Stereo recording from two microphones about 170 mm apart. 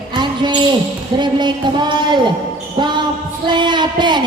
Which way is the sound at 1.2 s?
25° right (ahead or behind).